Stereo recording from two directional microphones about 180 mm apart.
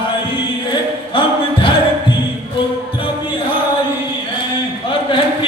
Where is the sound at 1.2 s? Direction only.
30° left (ahead or behind).